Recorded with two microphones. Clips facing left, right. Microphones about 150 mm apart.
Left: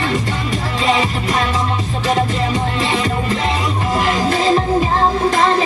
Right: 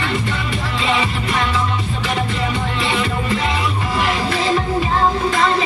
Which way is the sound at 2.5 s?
40° left (ahead or behind).